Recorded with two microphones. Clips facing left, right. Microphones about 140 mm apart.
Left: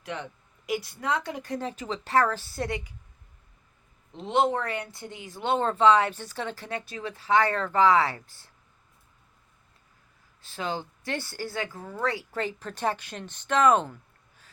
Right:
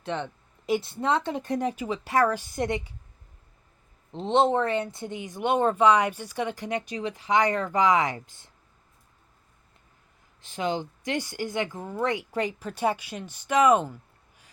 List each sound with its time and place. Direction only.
0.0 s speech: 30° right (ahead or behind)
4.1 s speech: 30° right (ahead or behind)
10.4 s speech: 15° right (ahead or behind)